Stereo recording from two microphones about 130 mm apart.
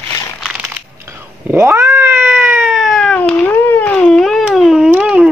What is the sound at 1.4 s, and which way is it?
Cat, 15° right (ahead or behind).